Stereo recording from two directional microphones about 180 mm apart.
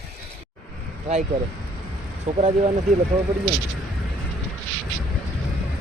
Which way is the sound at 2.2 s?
35° right (ahead or behind).